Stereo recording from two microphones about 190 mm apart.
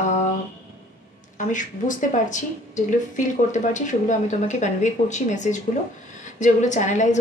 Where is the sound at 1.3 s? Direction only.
40° left (ahead or behind).